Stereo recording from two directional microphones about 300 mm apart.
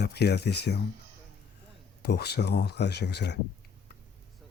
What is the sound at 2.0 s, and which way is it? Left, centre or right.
Speech, left.